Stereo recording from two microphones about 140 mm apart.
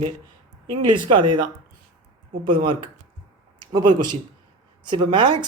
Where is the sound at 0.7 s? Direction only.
35° right (ahead or behind).